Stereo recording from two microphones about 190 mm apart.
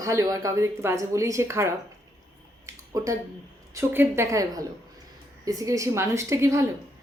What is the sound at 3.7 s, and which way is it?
Speech, 15° right (ahead or behind).